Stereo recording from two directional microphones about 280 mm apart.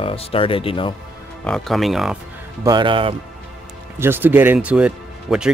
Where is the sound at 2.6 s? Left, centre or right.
Centre.